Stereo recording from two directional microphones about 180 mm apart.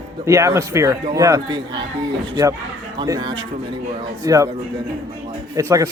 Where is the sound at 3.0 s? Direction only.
20° right (ahead or behind).